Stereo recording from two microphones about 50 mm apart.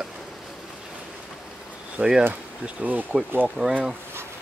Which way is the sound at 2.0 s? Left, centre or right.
Centre.